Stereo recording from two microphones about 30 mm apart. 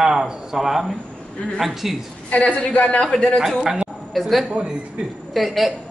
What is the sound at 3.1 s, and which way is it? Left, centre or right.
Speech, left.